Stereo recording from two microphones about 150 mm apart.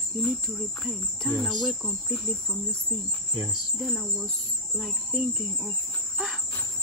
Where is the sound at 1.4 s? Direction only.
Centre (ahead or behind).